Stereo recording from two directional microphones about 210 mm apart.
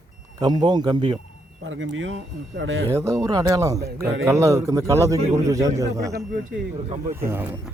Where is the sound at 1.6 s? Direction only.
65° right (ahead or behind).